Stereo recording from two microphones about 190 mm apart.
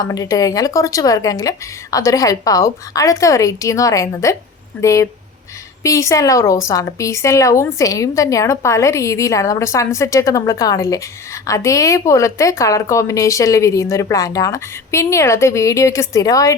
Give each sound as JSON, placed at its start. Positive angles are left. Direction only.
{"t": 0.0, "sound": "a woman's voice", "side_deg": 20}